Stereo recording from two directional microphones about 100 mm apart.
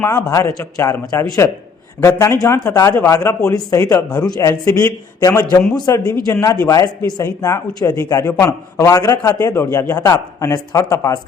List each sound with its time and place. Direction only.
0.1 s a man's voice: 35° left (ahead or behind)
9.5 s speech: 25° left (ahead or behind)